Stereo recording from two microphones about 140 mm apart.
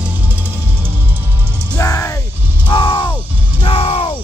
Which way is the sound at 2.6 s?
35° left (ahead or behind).